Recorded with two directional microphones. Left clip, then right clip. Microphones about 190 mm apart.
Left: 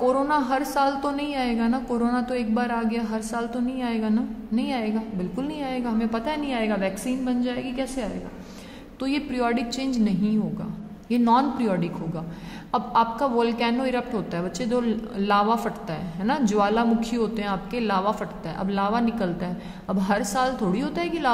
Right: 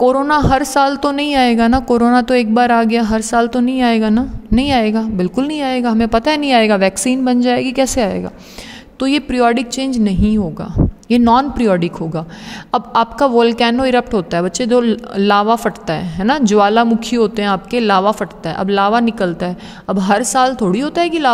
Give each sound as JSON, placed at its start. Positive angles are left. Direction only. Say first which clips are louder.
{"t": 0.0, "sound": "a woman's voice", "louder": "right 10 dB", "side_deg": -40}
{"t": 9.0, "sound": "a woman's voice", "louder": "right 12 dB", "side_deg": -45}